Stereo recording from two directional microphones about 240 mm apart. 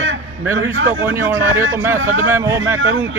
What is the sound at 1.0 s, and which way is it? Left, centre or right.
Speech, centre.